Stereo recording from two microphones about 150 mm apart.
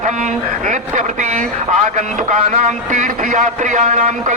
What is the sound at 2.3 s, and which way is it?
A man's voice, 55° right (ahead or behind).